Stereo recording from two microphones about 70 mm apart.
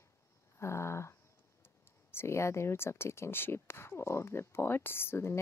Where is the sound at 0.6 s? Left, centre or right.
Left.